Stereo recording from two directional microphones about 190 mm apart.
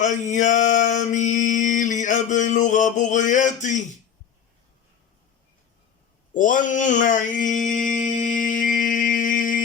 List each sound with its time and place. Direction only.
0.0 s mantra: 40° left (ahead or behind)
6.3 s mantra: 40° left (ahead or behind)